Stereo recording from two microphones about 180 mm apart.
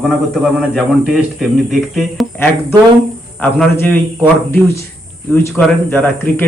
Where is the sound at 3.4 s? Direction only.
10° left (ahead or behind).